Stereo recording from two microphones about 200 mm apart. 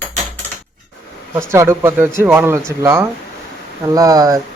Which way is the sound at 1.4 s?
15° right (ahead or behind).